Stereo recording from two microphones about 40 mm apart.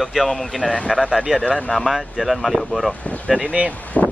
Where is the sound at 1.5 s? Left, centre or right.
Left.